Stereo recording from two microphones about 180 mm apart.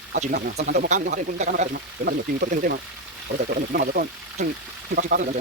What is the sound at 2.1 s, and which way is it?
Speech, 55° right (ahead or behind).